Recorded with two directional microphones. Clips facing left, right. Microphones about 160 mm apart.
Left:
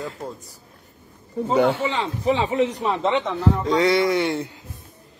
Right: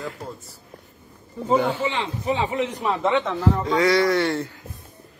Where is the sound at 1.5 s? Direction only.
70° left (ahead or behind).